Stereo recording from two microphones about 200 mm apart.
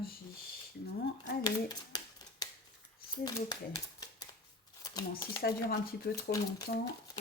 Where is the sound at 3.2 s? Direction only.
20° left (ahead or behind).